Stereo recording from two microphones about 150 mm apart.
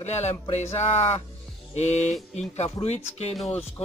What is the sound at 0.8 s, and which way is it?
Speech, 15° left (ahead or behind).